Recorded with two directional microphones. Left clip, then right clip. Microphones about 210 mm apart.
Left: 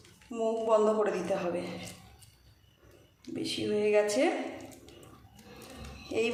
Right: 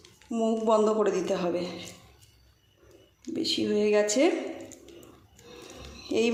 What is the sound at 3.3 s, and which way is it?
Speech, 30° right (ahead or behind).